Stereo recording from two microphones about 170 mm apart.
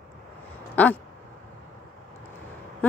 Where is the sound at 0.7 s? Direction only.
10° left (ahead or behind).